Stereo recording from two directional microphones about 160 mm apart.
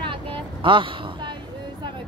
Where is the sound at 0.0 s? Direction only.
30° right (ahead or behind).